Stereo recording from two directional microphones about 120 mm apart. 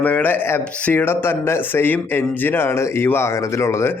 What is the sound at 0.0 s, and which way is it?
Speech, 15° left (ahead or behind).